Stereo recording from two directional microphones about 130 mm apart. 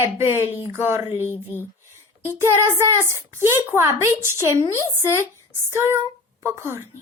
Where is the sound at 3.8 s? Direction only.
20° right (ahead or behind).